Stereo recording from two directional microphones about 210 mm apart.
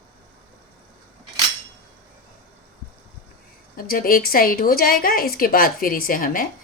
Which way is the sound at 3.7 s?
45° left (ahead or behind).